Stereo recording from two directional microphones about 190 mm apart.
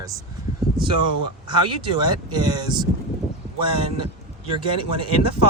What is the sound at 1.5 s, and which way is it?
Speech, 25° right (ahead or behind).